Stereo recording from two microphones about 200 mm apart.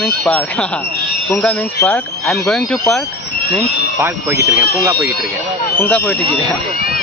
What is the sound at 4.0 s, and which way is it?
Speech, 10° right (ahead or behind).